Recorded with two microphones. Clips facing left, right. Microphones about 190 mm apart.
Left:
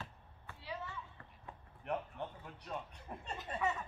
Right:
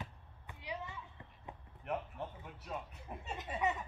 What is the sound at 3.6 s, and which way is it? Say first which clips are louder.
Speech: right 1 dB; 20° right (ahead or behind).